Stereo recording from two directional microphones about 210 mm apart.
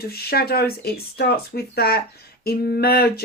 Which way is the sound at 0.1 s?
45° left (ahead or behind).